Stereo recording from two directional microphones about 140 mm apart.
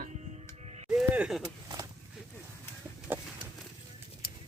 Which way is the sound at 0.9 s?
5° right (ahead or behind).